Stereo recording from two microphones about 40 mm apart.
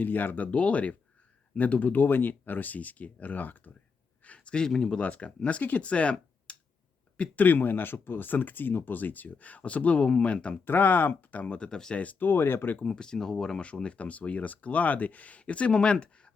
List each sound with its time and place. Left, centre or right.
0.0 s speech: left
0.5 s speech: left
2.4 s speech: left
4.4 s speech: left
4.9 s speech: left
7.2 s speech: left
10.7 s speech: left
12.2 s speech: left
12.9 s speech: centre
13.8 s speech: left